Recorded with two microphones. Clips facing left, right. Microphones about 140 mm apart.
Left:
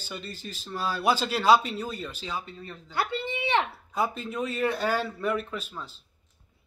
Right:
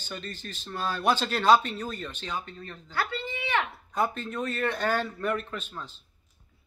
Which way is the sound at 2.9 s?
20° left (ahead or behind).